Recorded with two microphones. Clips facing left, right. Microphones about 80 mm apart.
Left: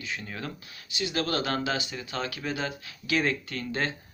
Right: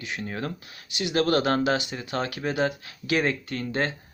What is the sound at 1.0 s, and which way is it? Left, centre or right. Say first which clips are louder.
Speech: right 6 dB; right.